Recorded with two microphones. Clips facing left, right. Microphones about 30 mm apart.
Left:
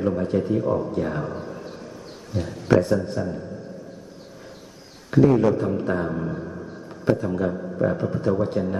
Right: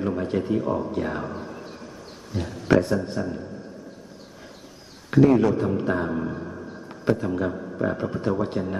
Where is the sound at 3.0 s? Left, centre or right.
Centre.